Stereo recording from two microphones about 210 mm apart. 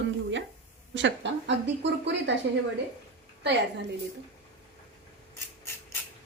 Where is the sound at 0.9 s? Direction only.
60° right (ahead or behind).